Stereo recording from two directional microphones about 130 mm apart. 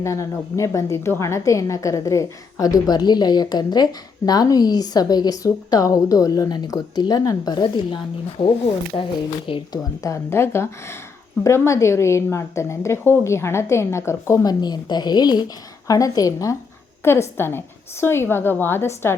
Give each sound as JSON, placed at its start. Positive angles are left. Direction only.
{"t": 0.0, "sound": "a woman's voice", "side_deg": 25}
{"t": 10.0, "sound": "a woman's voice", "side_deg": 20}